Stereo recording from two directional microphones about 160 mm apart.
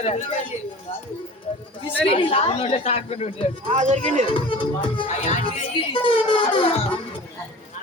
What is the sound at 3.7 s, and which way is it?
Speech, 50° right (ahead or behind).